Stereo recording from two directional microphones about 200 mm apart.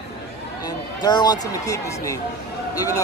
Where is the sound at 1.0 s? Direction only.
20° left (ahead or behind).